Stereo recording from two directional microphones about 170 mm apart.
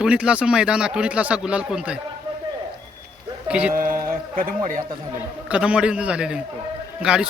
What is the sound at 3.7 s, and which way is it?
Speech, 55° right (ahead or behind).